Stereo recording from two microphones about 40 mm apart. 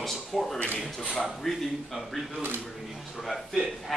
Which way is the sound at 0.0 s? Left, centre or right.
Centre.